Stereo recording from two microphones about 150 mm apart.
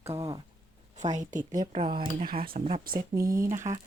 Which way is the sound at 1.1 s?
55° right (ahead or behind).